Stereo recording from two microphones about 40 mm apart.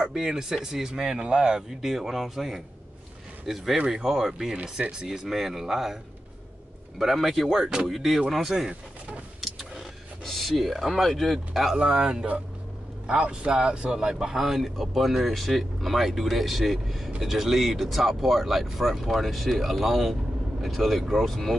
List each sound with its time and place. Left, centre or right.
0.1 s speech: centre
1.8 s speech: centre
7.0 s speech: centre
10.2 s speech: centre
11.7 s speech: centre